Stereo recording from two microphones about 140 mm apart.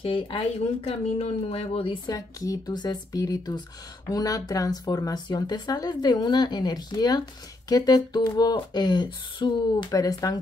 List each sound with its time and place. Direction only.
0.0 s a woman's voice: 40° left (ahead or behind)
2.1 s speech: 25° left (ahead or behind)